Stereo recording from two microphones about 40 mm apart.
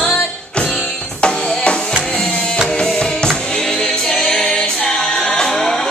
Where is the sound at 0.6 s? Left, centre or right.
Centre.